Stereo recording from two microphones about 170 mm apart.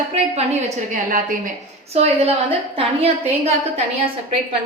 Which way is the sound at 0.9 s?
50° right (ahead or behind).